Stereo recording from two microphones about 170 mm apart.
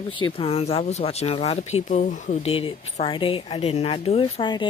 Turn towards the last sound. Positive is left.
turn(degrees=30)  # may be behind; listen again after turning